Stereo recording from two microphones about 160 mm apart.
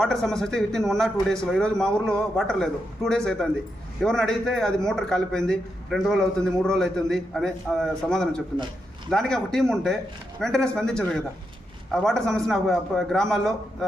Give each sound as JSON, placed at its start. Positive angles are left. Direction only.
{"t": 0.0, "sound": "a man's voice", "side_deg": 0}